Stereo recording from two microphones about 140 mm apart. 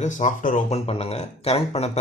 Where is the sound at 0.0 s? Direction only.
60° left (ahead or behind).